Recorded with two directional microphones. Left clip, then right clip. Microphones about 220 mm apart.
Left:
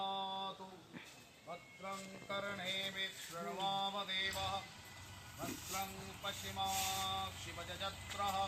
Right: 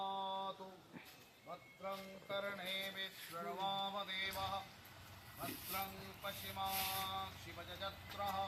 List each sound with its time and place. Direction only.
0.0 s a sound: centre (ahead or behind)
1.5 s speech: centre (ahead or behind)
6.2 s speech: centre (ahead or behind)